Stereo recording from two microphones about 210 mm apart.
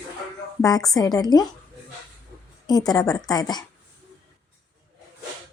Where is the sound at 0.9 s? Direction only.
20° left (ahead or behind).